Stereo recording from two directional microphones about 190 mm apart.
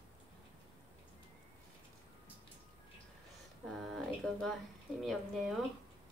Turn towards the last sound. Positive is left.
turn(degrees=0)  # may be behind; listen again after turning